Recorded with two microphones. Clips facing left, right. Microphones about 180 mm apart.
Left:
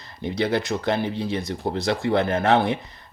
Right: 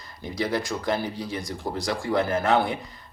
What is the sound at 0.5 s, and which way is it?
Speech, 25° left (ahead or behind).